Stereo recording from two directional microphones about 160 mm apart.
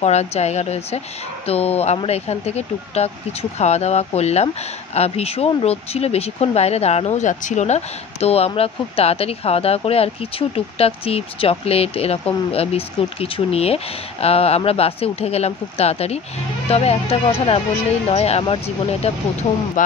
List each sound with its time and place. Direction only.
0.0 s a woman's voice: 45° left (ahead or behind)